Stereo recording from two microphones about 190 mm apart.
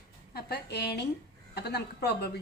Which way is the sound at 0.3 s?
55° left (ahead or behind).